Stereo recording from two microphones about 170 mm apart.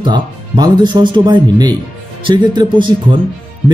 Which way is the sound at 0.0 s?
25° right (ahead or behind).